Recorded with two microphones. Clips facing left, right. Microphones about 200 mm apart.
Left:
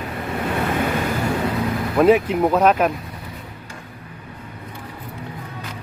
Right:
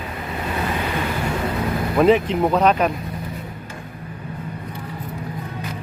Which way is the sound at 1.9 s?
5° left (ahead or behind).